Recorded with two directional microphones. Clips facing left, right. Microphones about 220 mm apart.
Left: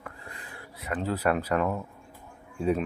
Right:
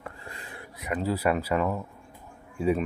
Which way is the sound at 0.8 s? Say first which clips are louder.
Right 2 dB; 10° right (ahead or behind).